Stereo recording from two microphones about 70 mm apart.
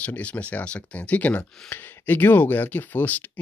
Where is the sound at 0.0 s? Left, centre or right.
Left.